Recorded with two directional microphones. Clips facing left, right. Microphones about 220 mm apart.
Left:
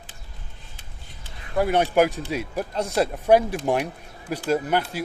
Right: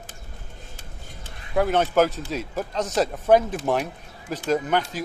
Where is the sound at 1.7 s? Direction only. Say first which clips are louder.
Left 2 dB; 15° left (ahead or behind).